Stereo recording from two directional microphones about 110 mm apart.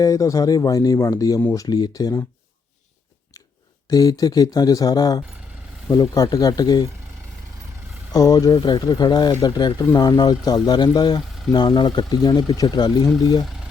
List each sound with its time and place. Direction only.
0.0 s speech: 30° left (ahead or behind)
3.8 s speech: 35° left (ahead or behind)
8.1 s speech: 35° left (ahead or behind)